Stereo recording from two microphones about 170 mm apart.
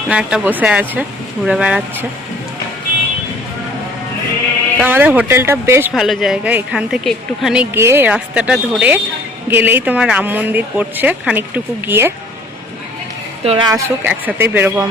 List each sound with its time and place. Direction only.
0.1 s speech: 5° right (ahead or behind)
4.8 s speech: 10° right (ahead or behind)
5.9 s a woman's voice: centre (ahead or behind)
13.4 s a woman's voice: 35° right (ahead or behind)
13.7 s speech: 15° right (ahead or behind)